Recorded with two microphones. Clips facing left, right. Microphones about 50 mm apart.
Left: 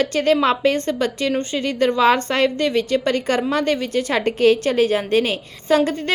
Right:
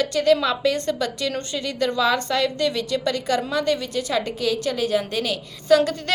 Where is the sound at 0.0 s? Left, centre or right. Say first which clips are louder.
Left 2 dB; left.